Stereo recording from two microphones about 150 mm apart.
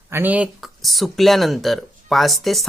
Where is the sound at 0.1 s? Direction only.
10° right (ahead or behind).